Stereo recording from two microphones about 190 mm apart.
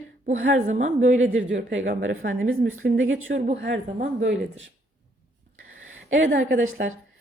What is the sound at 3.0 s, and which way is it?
Speech, 90° right.